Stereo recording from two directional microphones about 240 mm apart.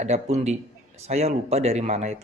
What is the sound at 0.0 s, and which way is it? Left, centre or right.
Speech, right.